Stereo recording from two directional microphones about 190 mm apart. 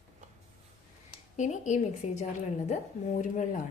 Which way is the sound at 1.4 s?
40° left (ahead or behind).